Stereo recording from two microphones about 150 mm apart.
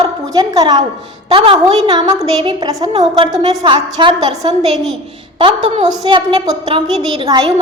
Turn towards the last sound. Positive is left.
turn(degrees=-30)  # may be behind; listen again after turning